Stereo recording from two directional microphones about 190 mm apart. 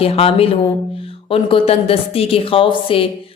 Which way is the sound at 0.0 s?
30° left (ahead or behind).